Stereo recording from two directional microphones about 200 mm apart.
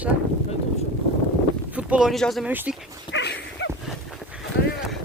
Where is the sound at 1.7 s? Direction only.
5° right (ahead or behind).